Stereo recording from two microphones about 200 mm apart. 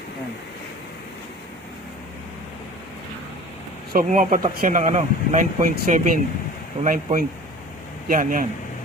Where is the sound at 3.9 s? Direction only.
45° right (ahead or behind).